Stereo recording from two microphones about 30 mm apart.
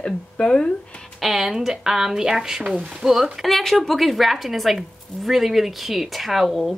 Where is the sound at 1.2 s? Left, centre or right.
Centre.